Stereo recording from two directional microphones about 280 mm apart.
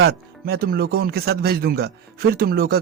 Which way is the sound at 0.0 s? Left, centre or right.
Right.